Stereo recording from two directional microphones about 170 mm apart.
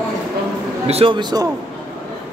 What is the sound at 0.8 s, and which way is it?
Speech, 35° right (ahead or behind).